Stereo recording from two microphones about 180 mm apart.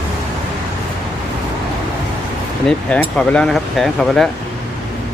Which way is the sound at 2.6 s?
5° left (ahead or behind).